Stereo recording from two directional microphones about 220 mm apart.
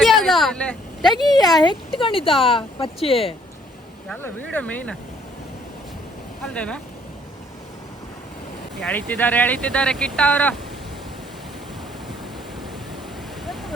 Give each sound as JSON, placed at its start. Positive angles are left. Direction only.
{"t": 0.0, "sound": "a sound", "side_deg": 0}
{"t": 1.4, "sound": "speech", "side_deg": 20}
{"t": 4.1, "sound": "speech", "side_deg": 5}
{"t": 6.4, "sound": "speech", "side_deg": 5}
{"t": 8.8, "sound": "speech", "side_deg": 5}
{"t": 13.4, "sound": "a sound", "side_deg": 0}